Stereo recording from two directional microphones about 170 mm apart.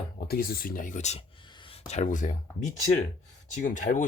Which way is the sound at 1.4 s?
30° left (ahead or behind).